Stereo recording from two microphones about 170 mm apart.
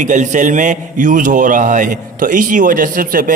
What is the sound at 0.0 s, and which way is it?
A man's voice, 45° right (ahead or behind).